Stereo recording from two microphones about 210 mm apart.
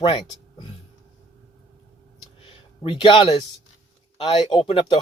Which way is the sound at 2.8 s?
25° left (ahead or behind).